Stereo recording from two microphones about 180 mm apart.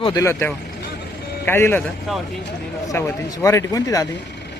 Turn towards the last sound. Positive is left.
turn(degrees=20)  # may be behind; listen again after turning